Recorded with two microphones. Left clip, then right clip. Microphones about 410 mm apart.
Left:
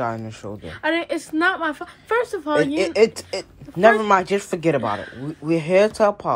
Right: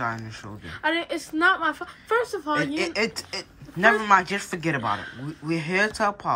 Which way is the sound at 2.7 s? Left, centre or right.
Centre.